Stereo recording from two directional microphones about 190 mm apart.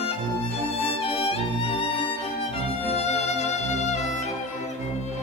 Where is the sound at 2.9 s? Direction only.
35° left (ahead or behind).